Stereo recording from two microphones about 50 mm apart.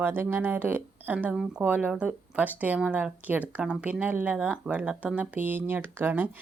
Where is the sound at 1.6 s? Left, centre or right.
Right.